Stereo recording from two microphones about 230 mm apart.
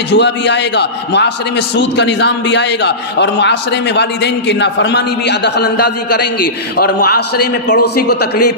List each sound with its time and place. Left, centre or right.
0.1 s a man's voice: left